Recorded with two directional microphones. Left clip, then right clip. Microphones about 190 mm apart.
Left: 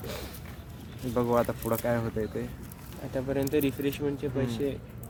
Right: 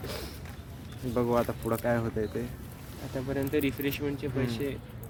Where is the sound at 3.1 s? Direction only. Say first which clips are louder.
Left 2 dB; 30° left (ahead or behind).